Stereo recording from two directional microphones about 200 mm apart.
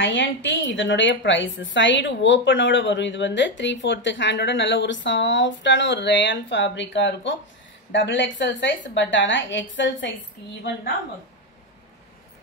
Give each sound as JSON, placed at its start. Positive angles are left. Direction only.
{"t": 0.0, "sound": "a woman's voice", "side_deg": 70}